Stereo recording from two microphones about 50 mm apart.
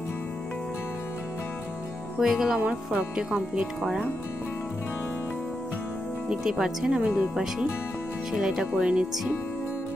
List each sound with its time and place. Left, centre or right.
2.1 s speech: centre
2.6 s speech: right
6.4 s speech: centre